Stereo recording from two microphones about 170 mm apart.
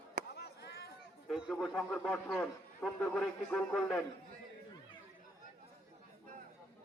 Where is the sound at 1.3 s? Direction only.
Centre (ahead or behind).